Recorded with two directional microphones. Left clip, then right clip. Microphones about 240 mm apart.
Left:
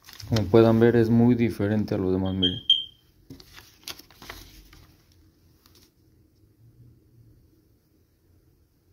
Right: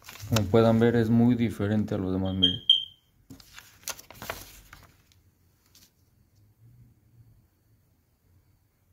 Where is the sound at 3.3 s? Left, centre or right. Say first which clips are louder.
Left 1 dB; centre.